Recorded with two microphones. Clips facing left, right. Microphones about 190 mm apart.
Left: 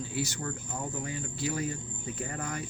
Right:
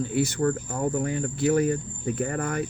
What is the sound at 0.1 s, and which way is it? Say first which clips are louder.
Speech: right 12 dB; 55° right (ahead or behind).